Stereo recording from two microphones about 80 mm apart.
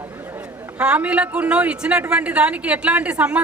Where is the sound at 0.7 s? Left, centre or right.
Centre.